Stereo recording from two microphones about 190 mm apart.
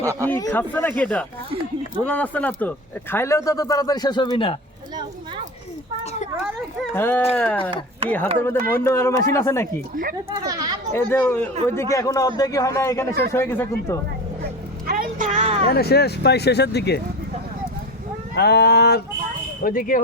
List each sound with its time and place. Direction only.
0.0 s speech: 15° right (ahead or behind)
0.3 s speech: 15° left (ahead or behind)
6.9 s speech: 10° left (ahead or behind)
10.3 s speech: 20° right (ahead or behind)
10.9 s speech: 10° left (ahead or behind)
14.8 s a sound: 45° right (ahead or behind)
15.6 s speech: 55° left (ahead or behind)
18.3 s speech: 60° left (ahead or behind)
19.6 s speech: 50° left (ahead or behind)